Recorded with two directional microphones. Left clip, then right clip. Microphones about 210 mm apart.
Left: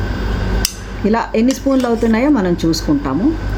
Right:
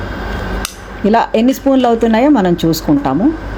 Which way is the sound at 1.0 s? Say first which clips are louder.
Right 4 dB; 15° right (ahead or behind).